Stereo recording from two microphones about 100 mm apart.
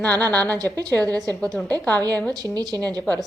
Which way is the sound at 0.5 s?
35° right (ahead or behind).